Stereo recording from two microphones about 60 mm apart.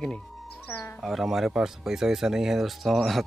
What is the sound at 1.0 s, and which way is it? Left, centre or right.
Speech, centre.